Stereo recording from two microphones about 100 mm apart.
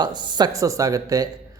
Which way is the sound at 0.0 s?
45° right (ahead or behind).